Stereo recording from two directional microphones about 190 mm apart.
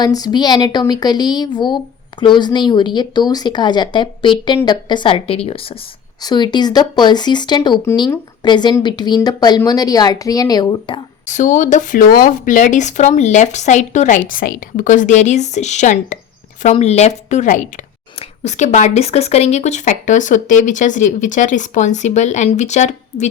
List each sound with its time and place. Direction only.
0.0 s speech: 20° left (ahead or behind)
11.3 s speech: 40° left (ahead or behind)